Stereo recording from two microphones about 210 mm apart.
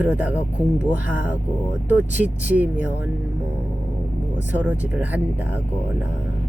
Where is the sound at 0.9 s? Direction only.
40° left (ahead or behind).